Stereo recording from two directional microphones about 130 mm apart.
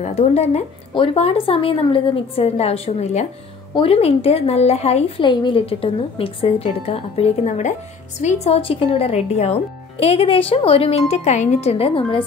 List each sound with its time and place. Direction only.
0.0 s speech: 55° left (ahead or behind)
3.7 s speech: 45° left (ahead or behind)
5.2 s speech: 40° left (ahead or behind); by 8.5 s 65° left (ahead or behind)
8.5 s speech: 45° left (ahead or behind)